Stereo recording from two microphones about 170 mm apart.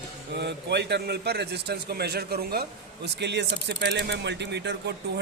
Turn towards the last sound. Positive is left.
turn(degrees=-90)